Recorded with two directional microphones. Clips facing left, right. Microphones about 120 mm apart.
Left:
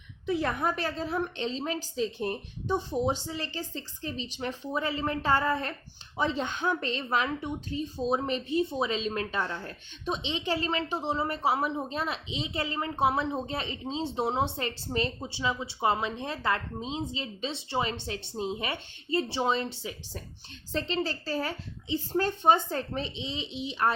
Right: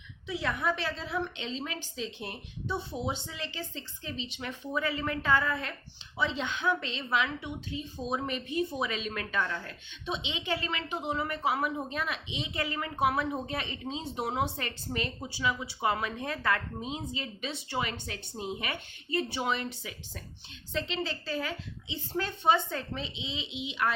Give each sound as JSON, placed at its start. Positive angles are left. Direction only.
{"t": 0.3, "sound": "a woman's voice", "side_deg": 50}